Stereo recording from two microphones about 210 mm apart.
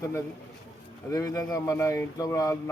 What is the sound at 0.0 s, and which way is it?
Speech, 15° left (ahead or behind).